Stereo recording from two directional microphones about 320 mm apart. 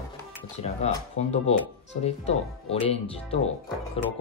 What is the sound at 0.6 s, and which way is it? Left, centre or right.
Speech, centre.